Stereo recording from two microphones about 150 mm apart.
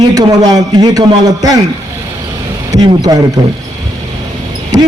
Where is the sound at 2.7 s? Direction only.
30° right (ahead or behind).